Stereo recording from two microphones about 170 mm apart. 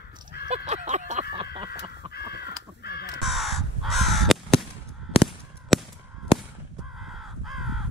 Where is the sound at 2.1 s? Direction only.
70° left (ahead or behind).